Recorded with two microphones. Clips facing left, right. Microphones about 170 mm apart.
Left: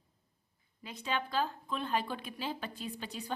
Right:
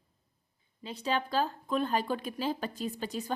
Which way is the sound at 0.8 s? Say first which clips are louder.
Right 5 dB; 35° right (ahead or behind).